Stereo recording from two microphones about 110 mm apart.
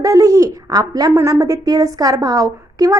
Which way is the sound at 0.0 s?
30° right (ahead or behind).